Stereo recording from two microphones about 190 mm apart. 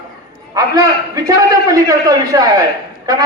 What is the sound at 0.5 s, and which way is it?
A man's voice, 20° right (ahead or behind).